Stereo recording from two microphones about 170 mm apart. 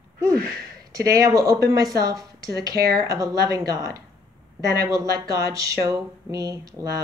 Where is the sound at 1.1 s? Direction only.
20° right (ahead or behind).